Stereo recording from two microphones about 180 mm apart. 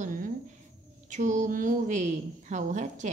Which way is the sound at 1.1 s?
40° right (ahead or behind).